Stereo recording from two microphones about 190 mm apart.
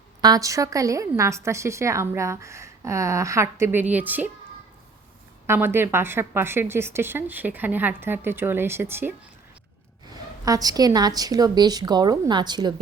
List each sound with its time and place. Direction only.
0.2 s a woman's voice: 20° right (ahead or behind)
5.5 s a woman's voice: 10° right (ahead or behind)
10.4 s a woman's voice: 20° right (ahead or behind)